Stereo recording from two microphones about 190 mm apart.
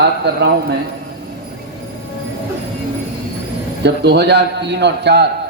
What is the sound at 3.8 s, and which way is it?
Speech, 60° right (ahead or behind).